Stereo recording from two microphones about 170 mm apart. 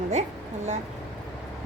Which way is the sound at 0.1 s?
40° right (ahead or behind).